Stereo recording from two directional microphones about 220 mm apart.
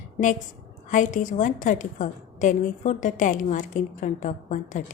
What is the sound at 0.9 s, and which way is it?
A woman's voice, 35° left (ahead or behind).